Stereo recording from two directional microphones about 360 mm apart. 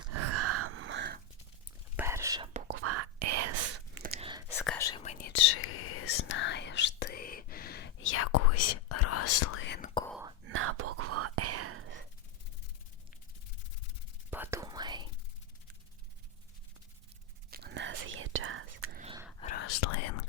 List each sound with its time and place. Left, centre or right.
0.1 s gasp: right
2.0 s whispering: centre
2.8 s whispering: right
3.9 s whispering: right
4.6 s whispering: centre; by 9.9 s left
10.1 s whispering: centre
10.4 s whispering: right
14.3 s whispering: centre
17.5 s whispering: right
18.9 s whispering: centre
19.4 s whispering: left
19.6 s whispering: left